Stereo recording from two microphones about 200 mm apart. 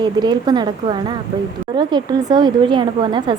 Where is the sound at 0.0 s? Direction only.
20° right (ahead or behind).